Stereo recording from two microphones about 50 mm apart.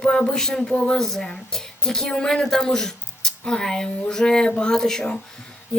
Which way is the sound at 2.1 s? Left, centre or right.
Centre.